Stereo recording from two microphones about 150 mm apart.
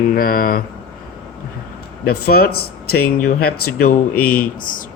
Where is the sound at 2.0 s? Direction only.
90° left.